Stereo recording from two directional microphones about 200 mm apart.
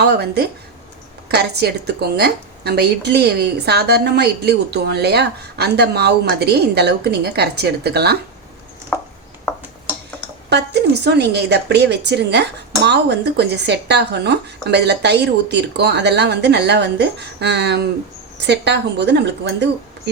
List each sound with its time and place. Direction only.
0.0 s a woman's voice: 55° right (ahead or behind)
10.5 s a woman's voice: 55° right (ahead or behind)